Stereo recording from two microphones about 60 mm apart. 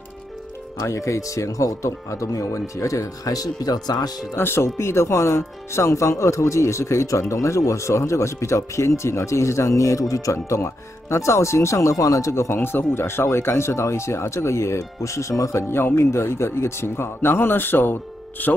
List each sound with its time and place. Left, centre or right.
0.7 s speech: left
4.4 s speech: left
15.7 s speech: left